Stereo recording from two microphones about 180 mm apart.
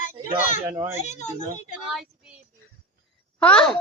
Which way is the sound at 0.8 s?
15° right (ahead or behind).